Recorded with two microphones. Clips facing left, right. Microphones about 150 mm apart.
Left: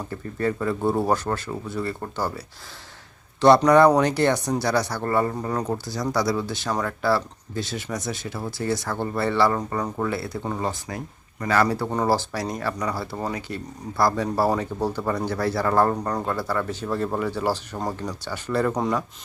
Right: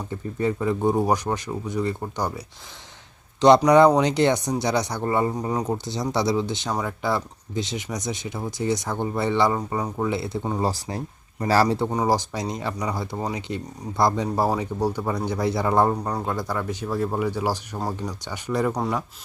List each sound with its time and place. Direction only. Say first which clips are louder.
0.1 s speech: right 1 dB; 15° right (ahead or behind)
3.4 s speech: even; 15° right (ahead or behind)
10.6 s speech: right 3 dB; 35° right (ahead or behind)
11.9 s speech: even; 15° right (ahead or behind)